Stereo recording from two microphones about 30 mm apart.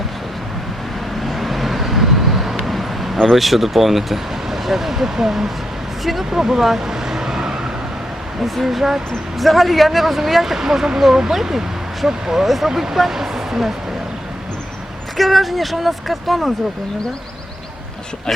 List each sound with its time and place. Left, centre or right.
1.2 s vehicle: centre
3.3 s speech: centre
6.7 s vehicle: centre
8.4 s speech: centre
15.2 s speech: centre
18.3 s speech: centre